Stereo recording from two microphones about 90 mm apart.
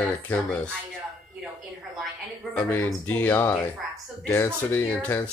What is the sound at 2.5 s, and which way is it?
Speech, 20° left (ahead or behind).